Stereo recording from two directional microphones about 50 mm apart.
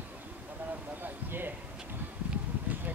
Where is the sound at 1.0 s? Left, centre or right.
Right.